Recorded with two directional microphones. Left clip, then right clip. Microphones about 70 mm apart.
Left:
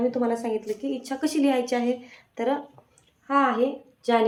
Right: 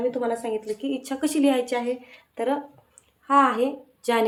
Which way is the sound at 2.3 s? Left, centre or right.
Right.